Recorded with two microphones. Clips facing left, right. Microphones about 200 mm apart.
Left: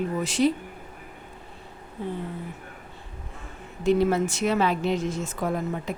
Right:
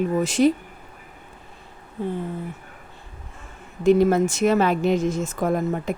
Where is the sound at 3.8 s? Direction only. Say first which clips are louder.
Right 5 dB; 45° right (ahead or behind).